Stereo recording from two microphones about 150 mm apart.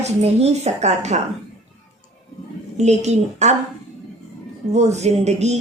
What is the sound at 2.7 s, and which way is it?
Speech, 50° right (ahead or behind).